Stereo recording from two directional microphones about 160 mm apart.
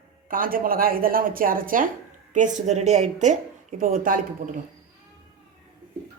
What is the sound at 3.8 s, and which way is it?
Speech, 60° right (ahead or behind).